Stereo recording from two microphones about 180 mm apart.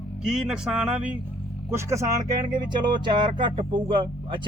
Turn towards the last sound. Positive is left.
turn(degrees=-25)  # may be behind; listen again after turning